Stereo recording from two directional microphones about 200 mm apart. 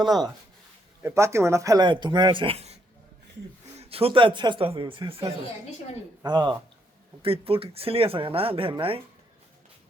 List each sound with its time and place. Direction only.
0.0 s speech: 20° right (ahead or behind)
3.8 s speech: 30° right (ahead or behind)